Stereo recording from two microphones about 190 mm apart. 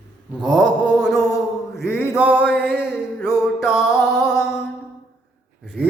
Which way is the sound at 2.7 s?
5° right (ahead or behind).